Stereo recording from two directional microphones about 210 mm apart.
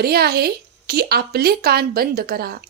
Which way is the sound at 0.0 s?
50° right (ahead or behind).